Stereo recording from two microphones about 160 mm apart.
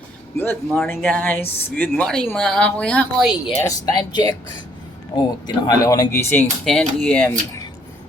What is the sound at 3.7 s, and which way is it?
Speech, 25° left (ahead or behind).